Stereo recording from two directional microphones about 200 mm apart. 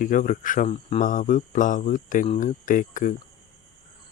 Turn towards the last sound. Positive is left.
turn(degrees=40)  # may be behind; listen again after turning